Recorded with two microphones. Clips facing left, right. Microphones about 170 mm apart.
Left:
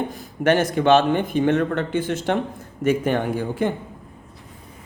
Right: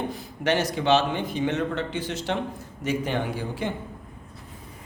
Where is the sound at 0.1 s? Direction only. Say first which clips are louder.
Left 6 dB; 50° left (ahead or behind).